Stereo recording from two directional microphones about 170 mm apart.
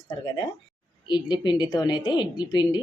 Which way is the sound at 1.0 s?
30° left (ahead or behind).